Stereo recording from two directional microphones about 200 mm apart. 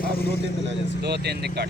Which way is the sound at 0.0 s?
50° left (ahead or behind).